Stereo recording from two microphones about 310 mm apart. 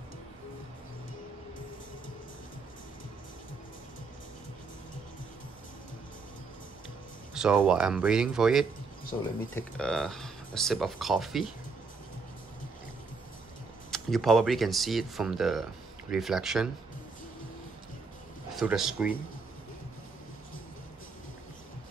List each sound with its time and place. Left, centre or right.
7.3 s speech: centre
13.8 s speech: centre
18.5 s speech: centre